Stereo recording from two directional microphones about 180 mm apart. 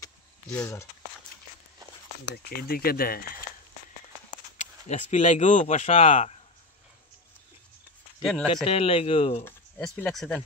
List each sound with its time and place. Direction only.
0.5 s speech: 10° left (ahead or behind)
2.3 s speech: 55° left (ahead or behind)
4.6 s speech: 40° left (ahead or behind)
8.2 s speech: 5° left (ahead or behind)
8.6 s speech: 30° left (ahead or behind)
9.4 s speech: 10° left (ahead or behind)